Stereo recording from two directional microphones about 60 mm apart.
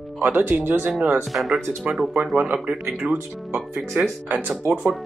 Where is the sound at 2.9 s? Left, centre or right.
Centre.